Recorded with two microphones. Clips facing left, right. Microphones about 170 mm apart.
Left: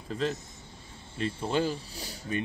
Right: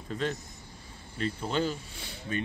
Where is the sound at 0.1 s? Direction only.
5° left (ahead or behind).